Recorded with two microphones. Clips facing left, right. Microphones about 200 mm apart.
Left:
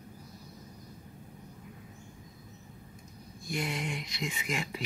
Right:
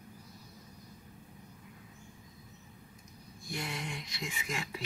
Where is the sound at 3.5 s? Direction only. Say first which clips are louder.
Left 5 dB; 20° left (ahead or behind).